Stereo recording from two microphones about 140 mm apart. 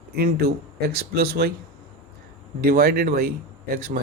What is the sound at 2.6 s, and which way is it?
Speech, 90° right.